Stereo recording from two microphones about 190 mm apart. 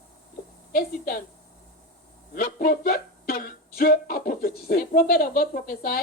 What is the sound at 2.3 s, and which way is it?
Speech, 50° left (ahead or behind).